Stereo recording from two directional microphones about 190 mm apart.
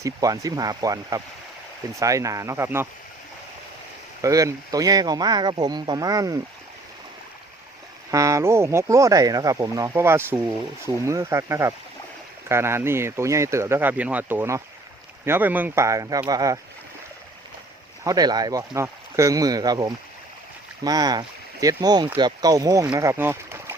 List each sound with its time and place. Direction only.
0.0 s speech: 20° right (ahead or behind)
4.2 s speech: 15° right (ahead or behind)
8.1 s speech: 15° right (ahead or behind)
18.0 s speech: 20° right (ahead or behind)